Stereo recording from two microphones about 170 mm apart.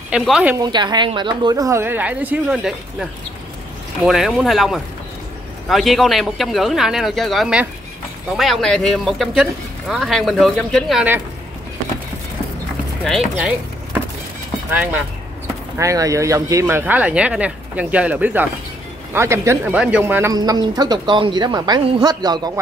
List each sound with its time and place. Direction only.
0.1 s speech: 5° right (ahead or behind)
0.6 s speech: 25° right (ahead or behind); by 11.1 s centre (ahead or behind)
13.0 s speech: centre (ahead or behind)
15.8 s speech: 20° right (ahead or behind)
20.3 s speech: 25° right (ahead or behind)